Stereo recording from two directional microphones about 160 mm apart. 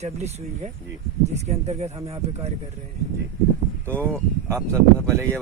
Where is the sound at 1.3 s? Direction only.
45° right (ahead or behind).